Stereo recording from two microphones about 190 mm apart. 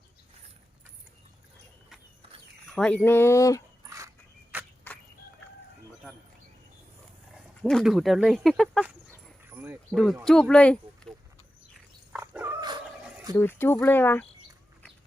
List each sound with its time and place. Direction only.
2.6 s speech: 5° left (ahead or behind)
3.8 s dog: 15° right (ahead or behind)
4.5 s a sound: 10° right (ahead or behind)
7.6 s speech: centre (ahead or behind)
9.5 s a sound: 10° right (ahead or behind)
9.9 s speech: centre (ahead or behind)
12.1 s dog: 10° right (ahead or behind)
12.5 s dog: 20° right (ahead or behind)
13.3 s speech: 10° left (ahead or behind)